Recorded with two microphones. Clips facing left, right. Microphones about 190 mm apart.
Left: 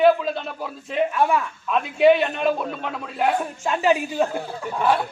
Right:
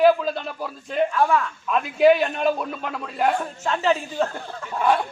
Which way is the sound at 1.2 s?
15° left (ahead or behind).